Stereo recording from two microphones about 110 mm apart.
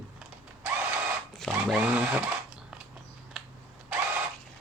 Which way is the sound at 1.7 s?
15° right (ahead or behind).